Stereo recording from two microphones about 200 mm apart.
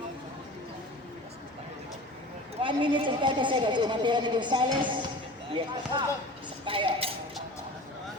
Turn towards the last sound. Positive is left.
turn(degrees=-30)  # may be behind; listen again after turning